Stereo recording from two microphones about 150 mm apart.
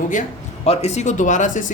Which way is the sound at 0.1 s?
50° left (ahead or behind).